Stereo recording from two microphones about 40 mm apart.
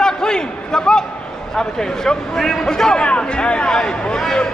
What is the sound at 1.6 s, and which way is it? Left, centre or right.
Speech, centre.